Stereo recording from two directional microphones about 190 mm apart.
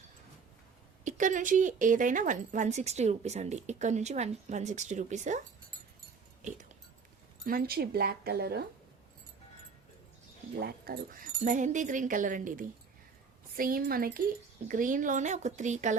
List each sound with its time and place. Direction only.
1.0 s speech: 40° right (ahead or behind)
7.4 s speech: 55° right (ahead or behind)
10.6 s speech: 55° right (ahead or behind); by 16.0 s 40° right (ahead or behind)